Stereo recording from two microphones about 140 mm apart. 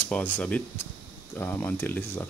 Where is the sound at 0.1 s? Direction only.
10° left (ahead or behind).